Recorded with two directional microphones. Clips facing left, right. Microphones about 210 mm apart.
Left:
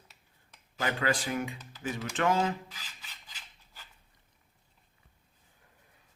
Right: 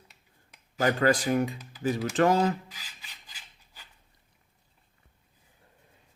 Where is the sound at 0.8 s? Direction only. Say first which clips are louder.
Right 7 dB; 40° right (ahead or behind).